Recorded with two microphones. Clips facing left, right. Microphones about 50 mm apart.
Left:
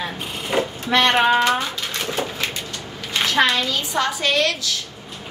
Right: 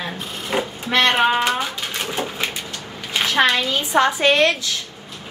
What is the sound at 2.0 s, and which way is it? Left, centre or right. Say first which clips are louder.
Bird: even; centre.